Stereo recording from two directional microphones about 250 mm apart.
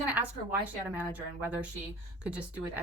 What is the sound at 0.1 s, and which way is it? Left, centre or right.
A woman's voice, centre.